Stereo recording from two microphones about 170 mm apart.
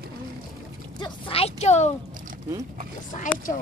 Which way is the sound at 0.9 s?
30° left (ahead or behind).